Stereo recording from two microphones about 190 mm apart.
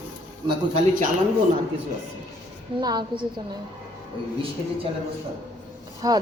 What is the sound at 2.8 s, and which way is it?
Speech, 25° right (ahead or behind).